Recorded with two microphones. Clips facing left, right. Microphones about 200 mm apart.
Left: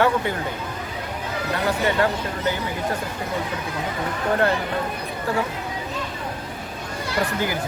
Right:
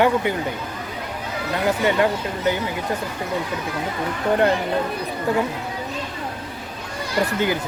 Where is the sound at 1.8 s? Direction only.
15° right (ahead or behind).